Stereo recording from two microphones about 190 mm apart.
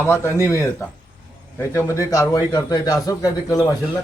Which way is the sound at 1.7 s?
15° left (ahead or behind).